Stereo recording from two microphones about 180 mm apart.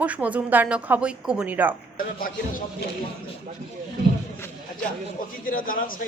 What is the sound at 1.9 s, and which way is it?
Speech, 50° left (ahead or behind).